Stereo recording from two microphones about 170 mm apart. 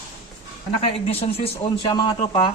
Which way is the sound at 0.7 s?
35° left (ahead or behind).